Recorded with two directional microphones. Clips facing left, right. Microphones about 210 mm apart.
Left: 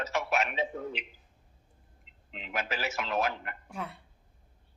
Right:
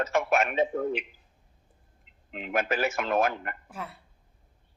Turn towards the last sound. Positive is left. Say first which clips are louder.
# left 1 dB
turn(degrees=0)  # may be behind; listen again after turning